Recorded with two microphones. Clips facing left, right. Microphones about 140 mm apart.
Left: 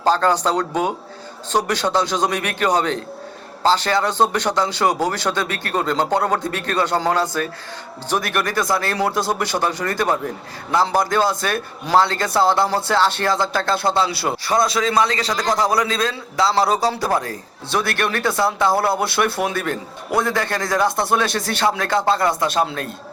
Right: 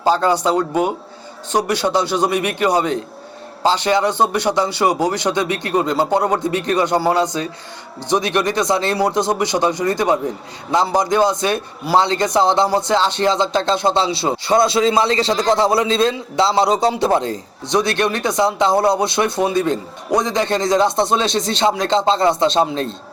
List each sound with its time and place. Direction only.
0.0 s a man's voice: 15° right (ahead or behind)